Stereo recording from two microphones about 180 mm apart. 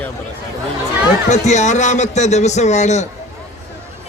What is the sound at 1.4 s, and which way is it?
A man's voice, 40° left (ahead or behind).